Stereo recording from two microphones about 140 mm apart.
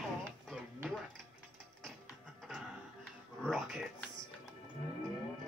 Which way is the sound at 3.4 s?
5° left (ahead or behind).